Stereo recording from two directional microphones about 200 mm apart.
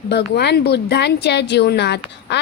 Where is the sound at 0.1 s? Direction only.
55° left (ahead or behind).